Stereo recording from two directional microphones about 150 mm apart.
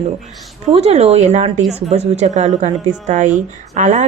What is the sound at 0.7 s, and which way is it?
A woman's voice, 45° right (ahead or behind).